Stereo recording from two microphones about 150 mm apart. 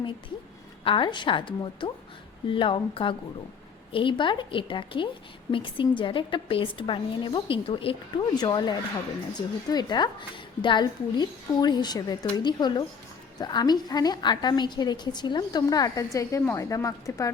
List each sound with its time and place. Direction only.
0.9 s a woman's voice: 35° left (ahead or behind)